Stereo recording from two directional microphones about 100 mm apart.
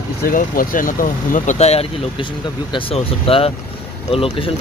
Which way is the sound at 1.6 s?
85° left.